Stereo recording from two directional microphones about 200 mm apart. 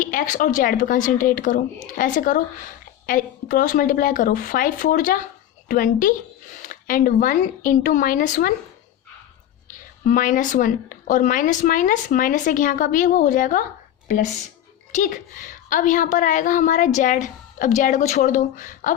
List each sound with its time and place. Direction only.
0.0 s a woman's voice: 40° left (ahead or behind)
10.1 s a woman's voice: 40° left (ahead or behind)
14.9 s a woman's voice: 40° left (ahead or behind)